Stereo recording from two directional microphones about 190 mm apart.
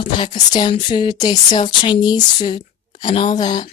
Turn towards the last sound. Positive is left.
turn(degrees=25)  # may be behind; listen again after turning